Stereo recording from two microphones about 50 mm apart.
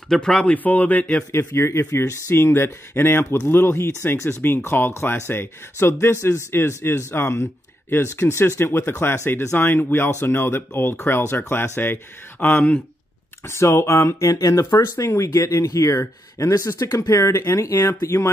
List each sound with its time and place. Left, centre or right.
0.1 s speech: centre
0.7 s speech: left
1.5 s speech: left
3.3 s speech: left
4.6 s speech: left
5.2 s speech: left
12.5 s speech: left
13.4 s speech: left